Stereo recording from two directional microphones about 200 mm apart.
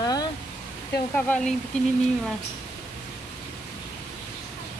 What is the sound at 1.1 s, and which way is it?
Speech, 5° left (ahead or behind).